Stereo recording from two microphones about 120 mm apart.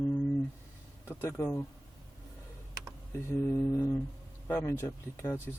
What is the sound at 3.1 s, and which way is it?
Speech, 20° left (ahead or behind).